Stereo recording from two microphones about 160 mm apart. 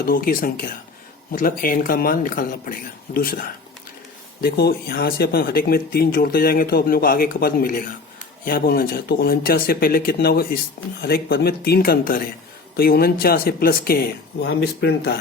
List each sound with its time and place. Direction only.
0.0 s speech: 65° left (ahead or behind)
4.4 s speech: 85° left; by 14.0 s 70° left (ahead or behind)
14.4 s speech: 90° left